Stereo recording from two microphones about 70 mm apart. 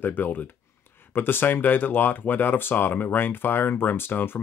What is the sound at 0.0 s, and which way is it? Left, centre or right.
Speech, left.